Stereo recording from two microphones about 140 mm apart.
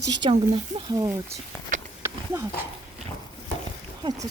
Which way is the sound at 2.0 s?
20° right (ahead or behind).